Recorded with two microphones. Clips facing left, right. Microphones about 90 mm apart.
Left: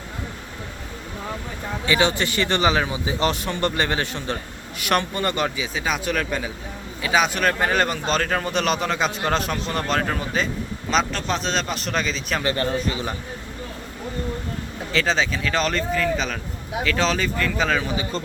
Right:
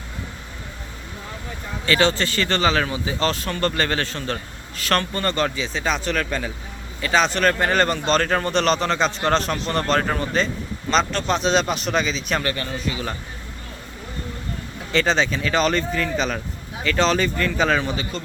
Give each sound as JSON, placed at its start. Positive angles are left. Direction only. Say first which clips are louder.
{"t": 1.9, "sound": "speech", "louder": "right 1 dB", "side_deg": 15}
{"t": 12.5, "sound": "a man's voice", "louder": "left 4 dB", "side_deg": 35}
{"t": 14.9, "sound": "speech", "louder": "right 2 dB", "side_deg": 0}